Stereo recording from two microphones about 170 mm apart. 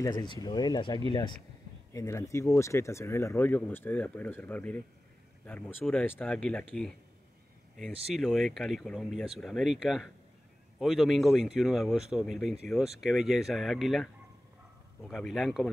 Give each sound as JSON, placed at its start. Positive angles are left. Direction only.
{"t": 0.0, "sound": "speech", "side_deg": 25}
{"t": 8.1, "sound": "speech", "side_deg": 0}